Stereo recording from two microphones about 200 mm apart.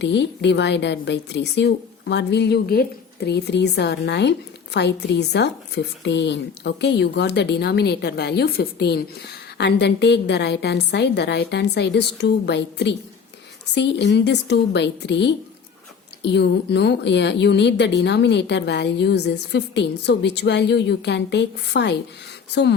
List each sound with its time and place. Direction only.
0.0 s a woman's voice: 60° left (ahead or behind)